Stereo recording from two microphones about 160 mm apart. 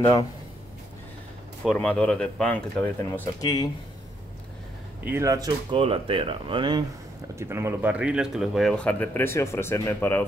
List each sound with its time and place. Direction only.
1.6 s speech: 5° left (ahead or behind)
3.3 s speech: 25° left (ahead or behind)
5.0 s speech: 15° right (ahead or behind)
5.8 s speech: 35° right (ahead or behind)
7.3 s speech: 15° right (ahead or behind); by 10.2 s 15° left (ahead or behind)